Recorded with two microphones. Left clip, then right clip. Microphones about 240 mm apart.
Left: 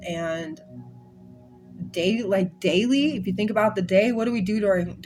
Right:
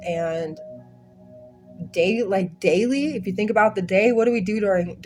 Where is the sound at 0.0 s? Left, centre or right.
Right.